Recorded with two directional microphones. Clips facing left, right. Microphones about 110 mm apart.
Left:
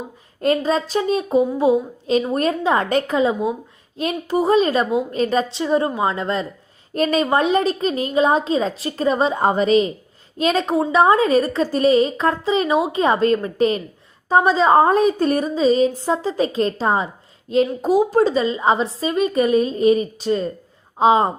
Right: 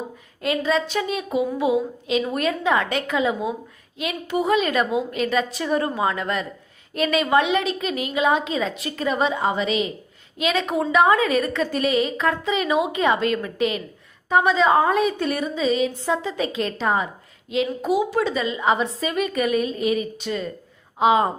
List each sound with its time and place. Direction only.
0.4 s a woman's voice: 40° left (ahead or behind)
5.5 s a woman's voice: 25° left (ahead or behind)